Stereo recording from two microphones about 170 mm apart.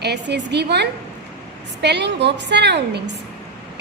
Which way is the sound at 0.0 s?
85° right.